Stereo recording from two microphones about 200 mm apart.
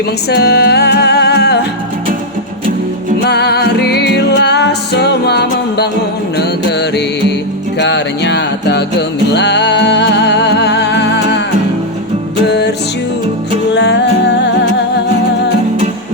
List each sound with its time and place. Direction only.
0.3 s music: 55° left (ahead or behind)
3.2 s music: 55° left (ahead or behind)
13.7 s music: 60° left (ahead or behind)